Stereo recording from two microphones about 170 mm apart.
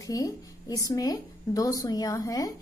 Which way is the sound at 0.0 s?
20° left (ahead or behind).